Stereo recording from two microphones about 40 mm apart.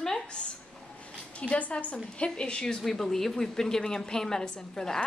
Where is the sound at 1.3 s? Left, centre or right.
Left.